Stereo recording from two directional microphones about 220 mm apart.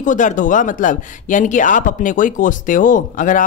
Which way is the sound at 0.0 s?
35° left (ahead or behind).